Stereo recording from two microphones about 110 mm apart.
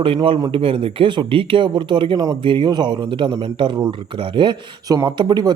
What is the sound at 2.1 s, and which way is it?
Speech, 30° right (ahead or behind).